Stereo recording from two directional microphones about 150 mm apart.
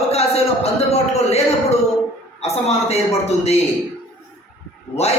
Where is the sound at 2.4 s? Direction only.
45° left (ahead or behind).